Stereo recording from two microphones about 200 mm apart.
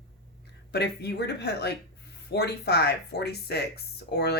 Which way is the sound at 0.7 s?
55° left (ahead or behind).